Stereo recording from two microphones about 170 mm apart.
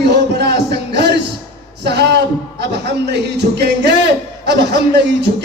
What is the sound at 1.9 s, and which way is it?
Music, 80° right.